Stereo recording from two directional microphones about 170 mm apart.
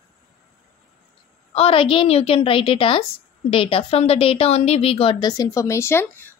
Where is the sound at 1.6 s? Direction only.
30° left (ahead or behind); by 6.3 s 15° left (ahead or behind).